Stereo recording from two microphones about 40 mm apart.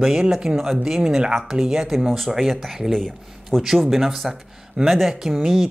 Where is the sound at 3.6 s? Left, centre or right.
Centre.